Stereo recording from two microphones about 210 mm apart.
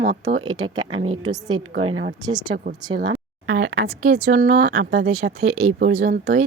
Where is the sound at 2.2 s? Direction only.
20° right (ahead or behind).